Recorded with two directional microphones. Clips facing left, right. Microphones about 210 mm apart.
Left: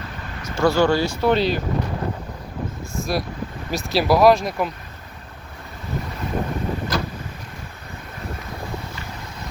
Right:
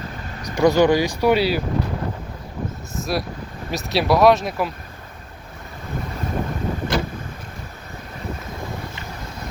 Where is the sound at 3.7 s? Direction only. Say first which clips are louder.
Even; centre (ahead or behind).